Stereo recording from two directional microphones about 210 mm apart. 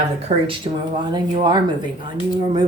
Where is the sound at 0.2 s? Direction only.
25° right (ahead or behind).